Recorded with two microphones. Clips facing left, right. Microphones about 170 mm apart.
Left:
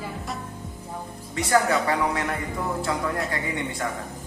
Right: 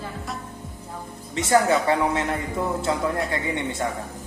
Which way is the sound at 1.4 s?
25° right (ahead or behind).